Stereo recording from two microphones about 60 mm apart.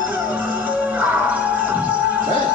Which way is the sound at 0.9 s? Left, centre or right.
Right.